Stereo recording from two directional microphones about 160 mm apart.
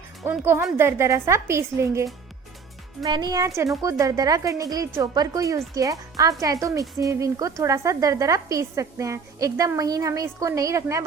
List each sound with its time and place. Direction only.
0.3 s a woman's voice: 15° right (ahead or behind)